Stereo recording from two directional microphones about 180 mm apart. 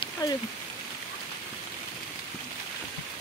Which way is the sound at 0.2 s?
20° left (ahead or behind).